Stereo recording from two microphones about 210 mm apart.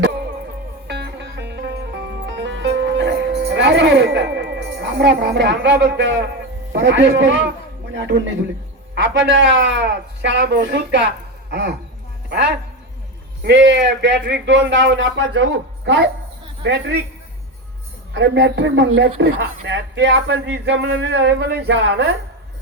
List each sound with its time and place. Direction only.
0.9 s music: 55° right (ahead or behind)
6.7 s a man's voice: 60° right (ahead or behind)
18.1 s speech: 55° right (ahead or behind)